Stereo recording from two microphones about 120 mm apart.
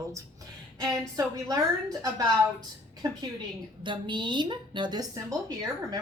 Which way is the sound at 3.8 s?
40° right (ahead or behind).